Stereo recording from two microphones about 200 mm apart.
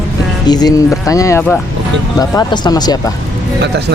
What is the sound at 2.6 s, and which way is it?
Speech, 20° left (ahead or behind).